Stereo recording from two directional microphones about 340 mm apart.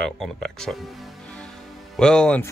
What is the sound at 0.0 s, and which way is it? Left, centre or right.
Speech, centre.